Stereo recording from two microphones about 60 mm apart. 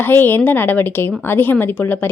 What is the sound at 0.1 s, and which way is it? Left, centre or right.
A woman's voice, left.